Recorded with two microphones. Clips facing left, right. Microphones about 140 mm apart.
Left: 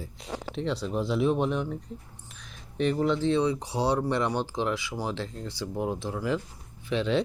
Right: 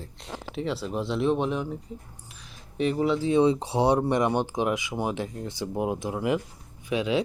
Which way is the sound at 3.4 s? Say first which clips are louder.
Right 5 dB; 25° right (ahead or behind).